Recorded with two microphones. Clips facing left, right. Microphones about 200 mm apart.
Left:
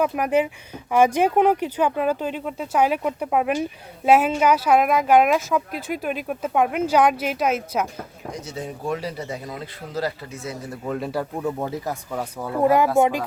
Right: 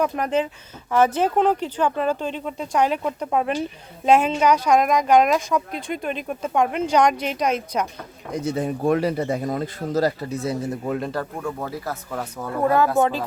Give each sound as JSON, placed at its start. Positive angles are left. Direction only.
{"t": 0.0, "sound": "speech", "side_deg": 10}
{"t": 8.3, "sound": "speech", "side_deg": -55}
{"t": 10.8, "sound": "speech", "side_deg": 0}
{"t": 11.1, "sound": "speech", "side_deg": 15}